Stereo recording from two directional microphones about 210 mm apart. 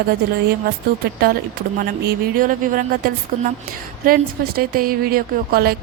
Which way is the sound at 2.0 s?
45° right (ahead or behind).